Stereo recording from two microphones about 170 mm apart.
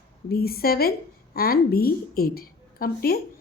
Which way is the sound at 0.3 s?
60° left (ahead or behind).